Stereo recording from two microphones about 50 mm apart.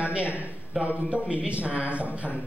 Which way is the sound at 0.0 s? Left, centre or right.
Right.